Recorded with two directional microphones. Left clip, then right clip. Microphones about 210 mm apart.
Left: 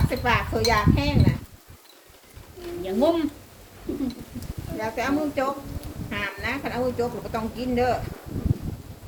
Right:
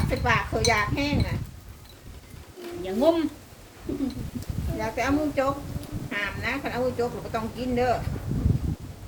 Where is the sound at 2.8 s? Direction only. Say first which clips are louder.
Even; 15° right (ahead or behind).